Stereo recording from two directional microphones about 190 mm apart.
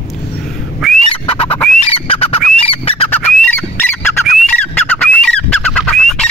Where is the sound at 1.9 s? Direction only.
30° left (ahead or behind).